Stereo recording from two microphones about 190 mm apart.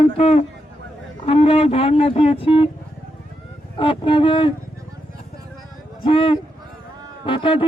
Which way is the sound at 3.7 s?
25° left (ahead or behind).